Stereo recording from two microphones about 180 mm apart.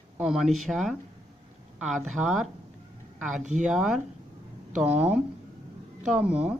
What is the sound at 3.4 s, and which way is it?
Speech, 45° right (ahead or behind).